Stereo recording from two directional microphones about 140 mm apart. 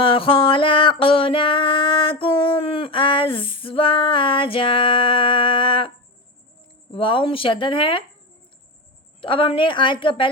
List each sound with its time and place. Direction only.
0.0 s a sound: 40° left (ahead or behind)
6.9 s speech: 40° left (ahead or behind)
9.2 s speech: 40° left (ahead or behind)